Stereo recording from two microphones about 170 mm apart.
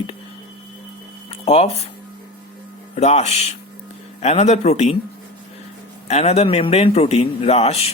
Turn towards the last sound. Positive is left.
turn(degrees=40)  # may be behind; listen again after turning